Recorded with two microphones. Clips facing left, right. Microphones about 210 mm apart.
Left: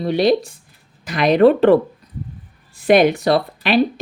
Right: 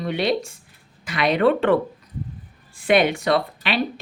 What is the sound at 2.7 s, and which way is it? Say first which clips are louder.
Speech: left 5 dB; 40° left (ahead or behind).